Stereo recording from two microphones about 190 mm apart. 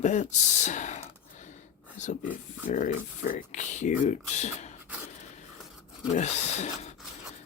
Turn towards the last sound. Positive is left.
turn(degrees=35)  # may be behind; listen again after turning